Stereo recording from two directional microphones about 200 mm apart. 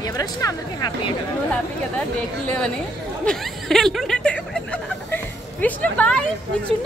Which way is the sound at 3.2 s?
5° left (ahead or behind).